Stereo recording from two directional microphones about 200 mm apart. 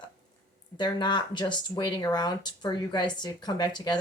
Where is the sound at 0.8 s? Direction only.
25° left (ahead or behind).